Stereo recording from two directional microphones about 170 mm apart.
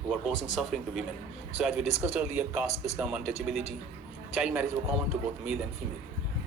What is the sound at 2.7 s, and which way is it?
Speech, 40° left (ahead or behind).